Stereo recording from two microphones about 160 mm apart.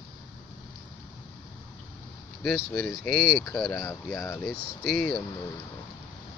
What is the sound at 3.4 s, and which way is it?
Speech, 20° left (ahead or behind).